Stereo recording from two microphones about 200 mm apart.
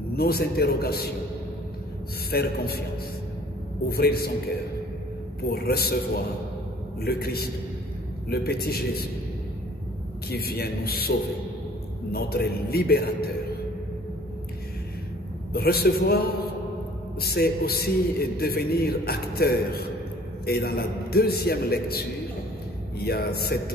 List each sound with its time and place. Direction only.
0.1 s a man's voice: 50° left (ahead or behind)
2.3 s a man's voice: 50° left (ahead or behind)
3.9 s a man's voice: 50° left (ahead or behind)
10.3 s a man's voice: 50° left (ahead or behind)
15.5 s a man's voice: 50° left (ahead or behind)